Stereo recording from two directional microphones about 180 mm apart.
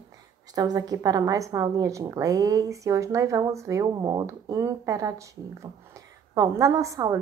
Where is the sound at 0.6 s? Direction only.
20° right (ahead or behind).